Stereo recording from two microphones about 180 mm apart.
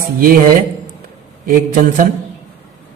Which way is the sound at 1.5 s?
50° right (ahead or behind).